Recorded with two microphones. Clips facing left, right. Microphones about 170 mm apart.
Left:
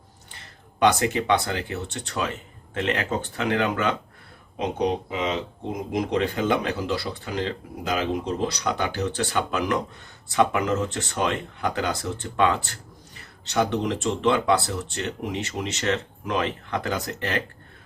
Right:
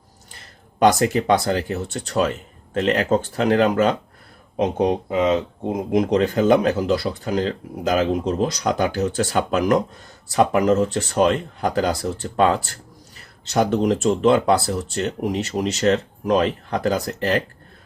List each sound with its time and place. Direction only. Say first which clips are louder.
0.8 s speech: right 4 dB; 40° right (ahead or behind)
4.5 s speech: right 5 dB; 50° right (ahead or behind)